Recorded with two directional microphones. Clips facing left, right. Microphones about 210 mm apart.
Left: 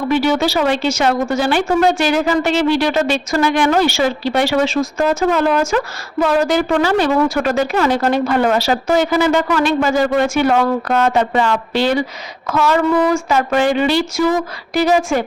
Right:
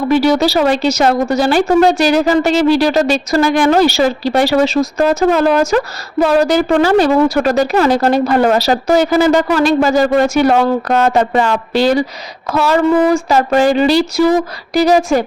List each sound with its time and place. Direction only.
0.1 s speech: 35° right (ahead or behind)